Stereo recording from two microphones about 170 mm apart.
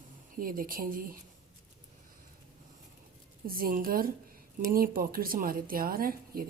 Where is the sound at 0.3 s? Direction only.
55° right (ahead or behind).